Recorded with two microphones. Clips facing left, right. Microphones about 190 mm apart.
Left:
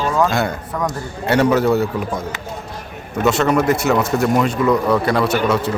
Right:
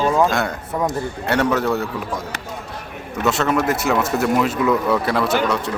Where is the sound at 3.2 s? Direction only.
Centre (ahead or behind).